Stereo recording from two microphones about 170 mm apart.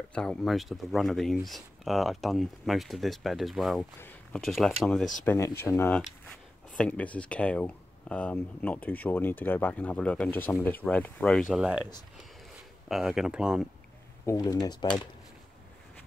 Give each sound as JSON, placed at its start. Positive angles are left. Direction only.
{"t": 0.1, "sound": "speech", "side_deg": 5}
{"t": 5.2, "sound": "speech", "side_deg": 15}
{"t": 12.8, "sound": "speech", "side_deg": 0}
{"t": 14.2, "sound": "speech", "side_deg": 20}